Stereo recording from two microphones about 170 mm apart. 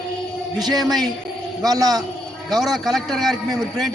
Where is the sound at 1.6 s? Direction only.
20° right (ahead or behind).